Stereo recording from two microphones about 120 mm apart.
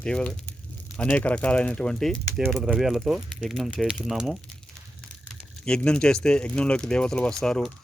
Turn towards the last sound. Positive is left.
turn(degrees=5)  # may be behind; listen again after turning